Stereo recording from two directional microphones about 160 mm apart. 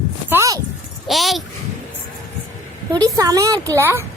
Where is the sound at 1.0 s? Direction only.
Centre (ahead or behind).